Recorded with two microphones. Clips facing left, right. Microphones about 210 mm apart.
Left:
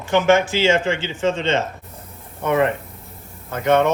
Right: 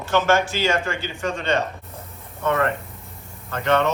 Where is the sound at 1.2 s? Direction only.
25° left (ahead or behind).